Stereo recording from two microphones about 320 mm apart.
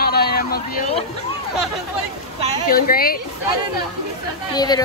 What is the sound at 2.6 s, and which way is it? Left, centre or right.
Speech, left.